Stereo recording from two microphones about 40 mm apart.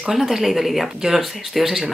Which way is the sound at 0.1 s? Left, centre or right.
Centre.